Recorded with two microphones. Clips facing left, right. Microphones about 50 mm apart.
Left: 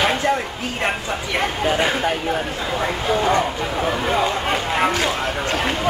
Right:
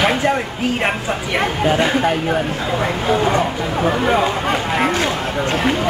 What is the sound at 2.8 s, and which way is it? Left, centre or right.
Speech, right.